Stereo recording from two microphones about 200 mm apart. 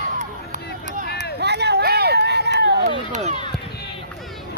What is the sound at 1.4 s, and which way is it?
Run, 55° right (ahead or behind).